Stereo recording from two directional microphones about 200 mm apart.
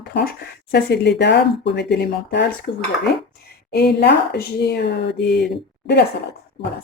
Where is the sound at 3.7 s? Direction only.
55° left (ahead or behind).